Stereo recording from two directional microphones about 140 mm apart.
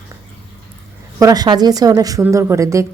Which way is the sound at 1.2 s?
30° right (ahead or behind).